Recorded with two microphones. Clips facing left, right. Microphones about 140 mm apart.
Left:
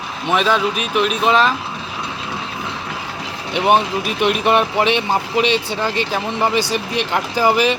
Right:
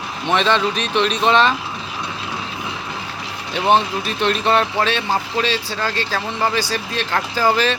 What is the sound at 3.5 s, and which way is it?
Speech, 10° left (ahead or behind).